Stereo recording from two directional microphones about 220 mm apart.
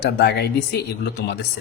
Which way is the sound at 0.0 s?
50° left (ahead or behind).